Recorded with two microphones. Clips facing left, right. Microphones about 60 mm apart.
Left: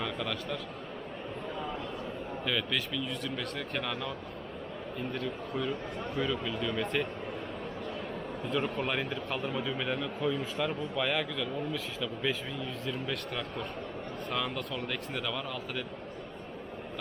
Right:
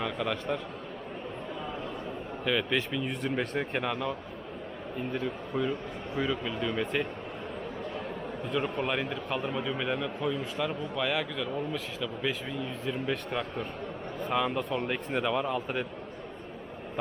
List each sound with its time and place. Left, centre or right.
0.0 s a man's voice: centre
2.4 s speech: centre
3.0 s speech: right; by 4.1 s centre
5.1 s a man's voice: centre
8.4 s a man's voice: centre; by 15.9 s right